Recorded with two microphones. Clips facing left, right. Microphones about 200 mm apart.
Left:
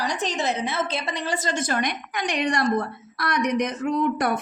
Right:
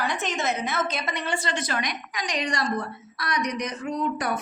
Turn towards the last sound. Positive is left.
turn(degrees=55)  # may be behind; listen again after turning